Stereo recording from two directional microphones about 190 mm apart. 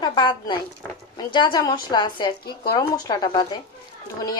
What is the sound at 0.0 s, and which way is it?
Speech, 25° left (ahead or behind).